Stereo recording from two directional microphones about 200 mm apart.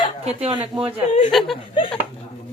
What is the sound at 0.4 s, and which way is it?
Speech, 25° right (ahead or behind).